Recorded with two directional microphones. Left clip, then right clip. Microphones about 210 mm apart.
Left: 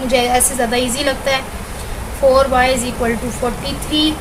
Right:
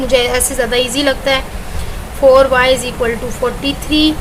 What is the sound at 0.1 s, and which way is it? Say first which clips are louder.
A woman's voice: right 1 dB; 35° right (ahead or behind).